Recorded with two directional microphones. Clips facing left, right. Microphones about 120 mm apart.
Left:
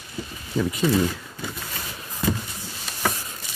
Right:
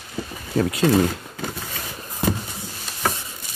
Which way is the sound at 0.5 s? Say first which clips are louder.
Right 3 dB; 75° right (ahead or behind).